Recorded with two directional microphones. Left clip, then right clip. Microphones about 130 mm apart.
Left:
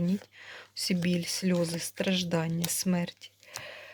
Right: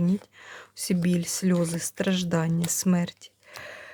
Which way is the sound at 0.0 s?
30° right (ahead or behind).